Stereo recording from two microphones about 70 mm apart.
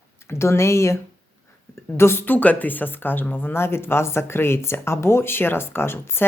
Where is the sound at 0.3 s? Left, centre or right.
Left.